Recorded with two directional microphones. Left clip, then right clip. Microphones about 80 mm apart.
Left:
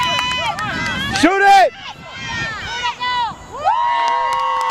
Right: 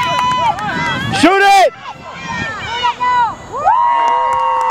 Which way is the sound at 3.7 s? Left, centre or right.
Left.